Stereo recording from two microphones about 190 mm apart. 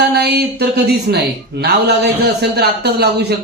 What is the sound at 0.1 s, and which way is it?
Speech, 60° right (ahead or behind).